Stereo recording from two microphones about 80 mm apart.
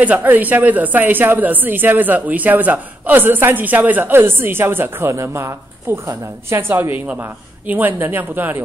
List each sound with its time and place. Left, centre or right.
0.0 s a woman's voice: right